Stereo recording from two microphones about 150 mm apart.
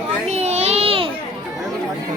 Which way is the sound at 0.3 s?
45° right (ahead or behind).